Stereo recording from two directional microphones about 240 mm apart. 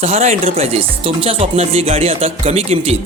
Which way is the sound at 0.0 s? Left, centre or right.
Right.